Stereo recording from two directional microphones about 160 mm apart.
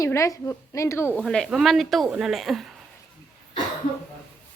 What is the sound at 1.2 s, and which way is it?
Speech, centre (ahead or behind).